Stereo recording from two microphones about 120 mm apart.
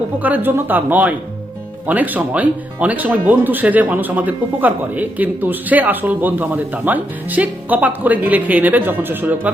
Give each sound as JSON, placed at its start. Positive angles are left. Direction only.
{"t": 0.2, "sound": "speech", "side_deg": -15}